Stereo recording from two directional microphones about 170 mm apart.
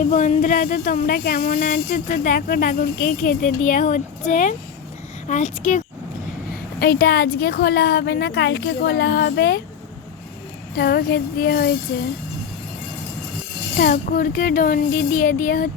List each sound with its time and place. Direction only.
0.1 s speech: 45° left (ahead or behind)
6.5 s speech: 65° left (ahead or behind)
10.8 s a child's voice: 65° left (ahead or behind)
13.7 s a child's voice: 55° left (ahead or behind)